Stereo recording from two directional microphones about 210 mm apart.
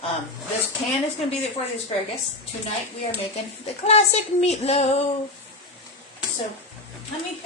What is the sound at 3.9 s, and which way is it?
Child singing, 30° left (ahead or behind).